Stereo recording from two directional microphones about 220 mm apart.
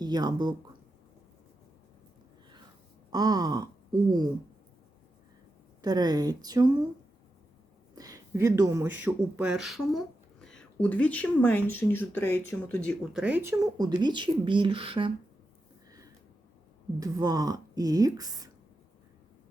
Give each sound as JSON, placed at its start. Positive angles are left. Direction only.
{"t": 0.0, "sound": "speech", "side_deg": -20}
{"t": 3.1, "sound": "speech", "side_deg": -15}
{"t": 5.8, "sound": "speech", "side_deg": -20}
{"t": 7.9, "sound": "speech", "side_deg": -15}
{"t": 17.0, "sound": "speech", "side_deg": -15}